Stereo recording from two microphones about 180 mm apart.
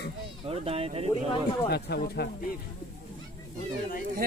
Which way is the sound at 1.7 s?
60° left (ahead or behind).